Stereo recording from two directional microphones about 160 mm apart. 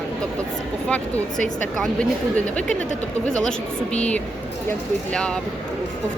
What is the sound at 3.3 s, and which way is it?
Speech, 5° left (ahead or behind).